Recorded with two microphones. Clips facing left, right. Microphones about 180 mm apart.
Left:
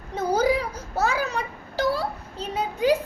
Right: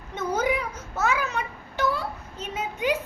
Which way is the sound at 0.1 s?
35° left (ahead or behind).